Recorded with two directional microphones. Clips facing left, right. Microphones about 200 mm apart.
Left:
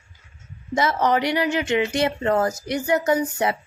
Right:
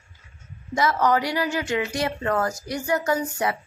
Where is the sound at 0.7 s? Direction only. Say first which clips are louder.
Left 1 dB; 25° left (ahead or behind).